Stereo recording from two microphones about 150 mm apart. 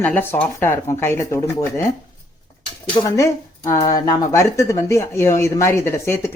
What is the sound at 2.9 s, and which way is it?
Speech, 25° left (ahead or behind).